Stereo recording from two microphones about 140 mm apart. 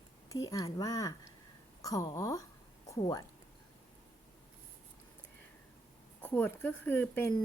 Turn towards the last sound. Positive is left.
turn(degrees=10)  # may be behind; listen again after turning